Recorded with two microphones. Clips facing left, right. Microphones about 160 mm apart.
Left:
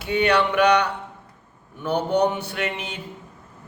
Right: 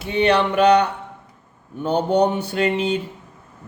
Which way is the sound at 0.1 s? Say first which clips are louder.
Right 2 dB; 25° right (ahead or behind).